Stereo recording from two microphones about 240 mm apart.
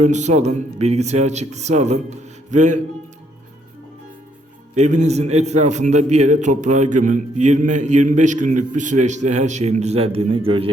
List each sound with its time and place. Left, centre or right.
0.0 s a man's voice: right
4.7 s a man's voice: right